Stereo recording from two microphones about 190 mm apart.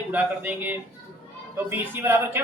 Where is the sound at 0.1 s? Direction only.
10° right (ahead or behind).